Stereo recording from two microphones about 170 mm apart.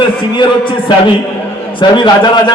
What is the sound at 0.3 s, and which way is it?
A man's voice, 30° left (ahead or behind).